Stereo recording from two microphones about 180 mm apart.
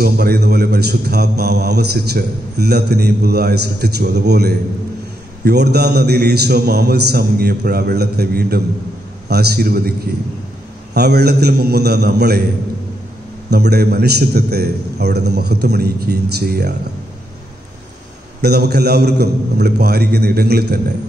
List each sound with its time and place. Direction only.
0.0 s a man's voice: 65° right (ahead or behind)
13.5 s a man's voice: 65° right (ahead or behind)
18.4 s a man's voice: 65° right (ahead or behind)